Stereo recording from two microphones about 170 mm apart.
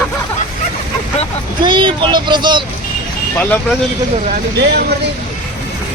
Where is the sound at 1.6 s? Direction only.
30° right (ahead or behind).